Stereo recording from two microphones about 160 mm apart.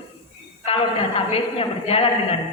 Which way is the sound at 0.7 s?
35° left (ahead or behind).